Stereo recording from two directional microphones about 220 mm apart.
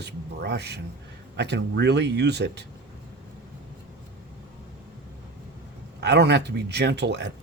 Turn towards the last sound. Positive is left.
turn(degrees=-50)  # may be behind; listen again after turning